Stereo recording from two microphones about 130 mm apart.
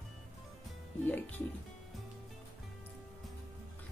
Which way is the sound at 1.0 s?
15° left (ahead or behind).